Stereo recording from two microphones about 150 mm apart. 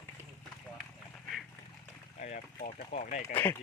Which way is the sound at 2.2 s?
55° left (ahead or behind).